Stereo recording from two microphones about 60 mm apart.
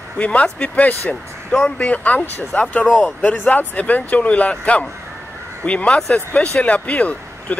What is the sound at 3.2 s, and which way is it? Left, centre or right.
Speech, left.